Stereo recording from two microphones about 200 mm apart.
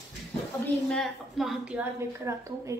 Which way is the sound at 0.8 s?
Centre (ahead or behind).